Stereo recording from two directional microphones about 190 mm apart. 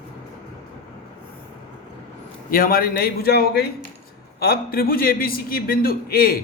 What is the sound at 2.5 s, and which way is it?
A man's voice, 50° left (ahead or behind).